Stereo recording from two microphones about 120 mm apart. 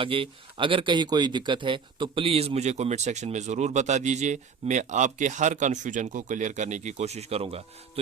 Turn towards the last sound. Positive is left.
turn(degrees=-55)  # may be behind; listen again after turning